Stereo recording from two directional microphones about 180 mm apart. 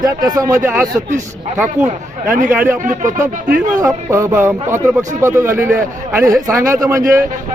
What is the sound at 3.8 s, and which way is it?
A man's voice, 15° right (ahead or behind).